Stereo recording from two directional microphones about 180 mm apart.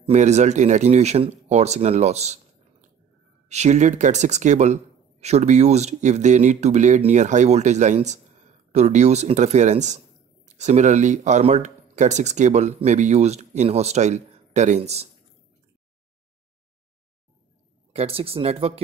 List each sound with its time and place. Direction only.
0.0 s speech: 40° right (ahead or behind)
17.9 s speech: 35° right (ahead or behind)